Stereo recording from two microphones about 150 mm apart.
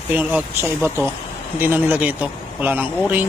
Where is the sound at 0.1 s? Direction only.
10° right (ahead or behind).